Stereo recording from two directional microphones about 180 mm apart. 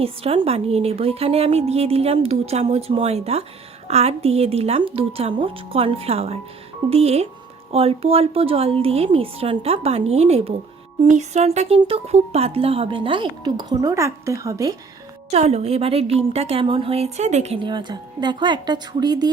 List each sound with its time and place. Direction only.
0.0 s a woman's voice: 30° right (ahead or behind)
15.3 s a woman's voice: 35° right (ahead or behind)